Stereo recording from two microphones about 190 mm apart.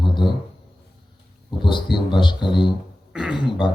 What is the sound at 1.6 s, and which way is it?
Speech, 25° left (ahead or behind).